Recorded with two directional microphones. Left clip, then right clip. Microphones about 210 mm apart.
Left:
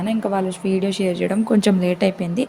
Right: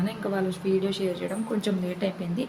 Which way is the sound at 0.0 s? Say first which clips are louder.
Left 7 dB; 30° left (ahead or behind).